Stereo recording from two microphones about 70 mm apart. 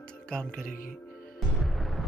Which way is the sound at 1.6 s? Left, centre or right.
Centre.